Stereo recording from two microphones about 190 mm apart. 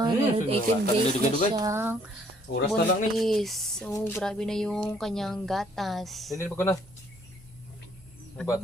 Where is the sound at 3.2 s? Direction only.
Centre (ahead or behind).